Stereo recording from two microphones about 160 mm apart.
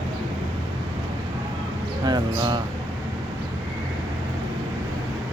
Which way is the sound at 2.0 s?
25° right (ahead or behind).